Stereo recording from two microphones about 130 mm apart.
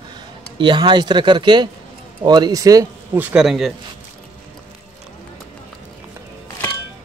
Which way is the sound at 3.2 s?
10° right (ahead or behind).